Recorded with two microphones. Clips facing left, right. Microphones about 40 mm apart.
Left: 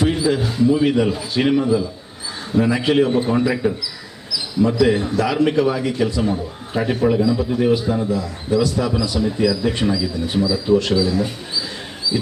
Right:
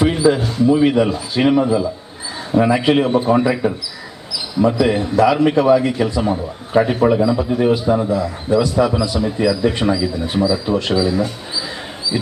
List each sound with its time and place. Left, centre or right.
0.0 s a man's voice: centre
0.7 s a man's voice: centre
4.3 s basketball bounce: centre
5.1 s a man's voice: centre
6.7 s a man's voice: right
7.1 s a man's voice: centre